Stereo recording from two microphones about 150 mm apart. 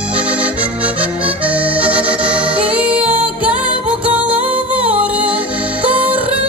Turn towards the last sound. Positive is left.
turn(degrees=-10)  # may be behind; listen again after turning